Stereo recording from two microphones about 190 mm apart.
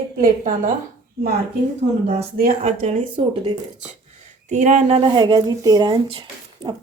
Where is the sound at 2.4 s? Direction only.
40° right (ahead or behind).